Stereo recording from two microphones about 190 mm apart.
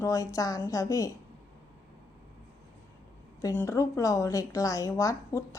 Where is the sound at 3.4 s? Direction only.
15° left (ahead or behind).